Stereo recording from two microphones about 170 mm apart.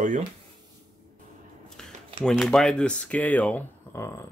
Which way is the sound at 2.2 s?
5° left (ahead or behind).